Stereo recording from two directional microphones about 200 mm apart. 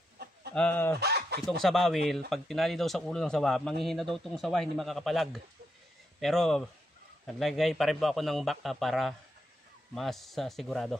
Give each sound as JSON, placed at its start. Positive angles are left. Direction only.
{"t": 0.6, "sound": "speech", "side_deg": 10}
{"t": 0.9, "sound": "a sound", "side_deg": -55}
{"t": 1.6, "sound": "speech", "side_deg": 0}